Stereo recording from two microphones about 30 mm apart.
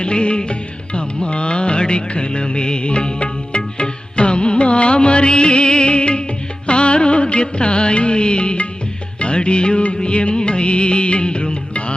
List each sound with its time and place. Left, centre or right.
0.0 s music: left